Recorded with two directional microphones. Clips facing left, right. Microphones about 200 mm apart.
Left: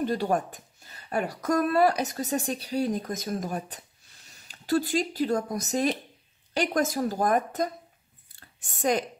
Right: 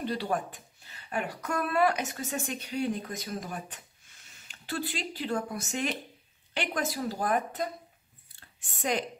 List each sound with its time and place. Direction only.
0.0 s a woman's voice: 45° left (ahead or behind)